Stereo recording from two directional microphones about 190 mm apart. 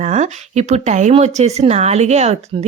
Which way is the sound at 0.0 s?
35° right (ahead or behind).